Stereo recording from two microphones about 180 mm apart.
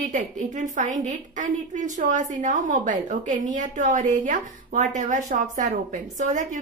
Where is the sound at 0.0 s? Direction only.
45° right (ahead or behind).